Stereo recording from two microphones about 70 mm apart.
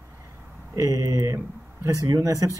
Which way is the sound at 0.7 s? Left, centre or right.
Right.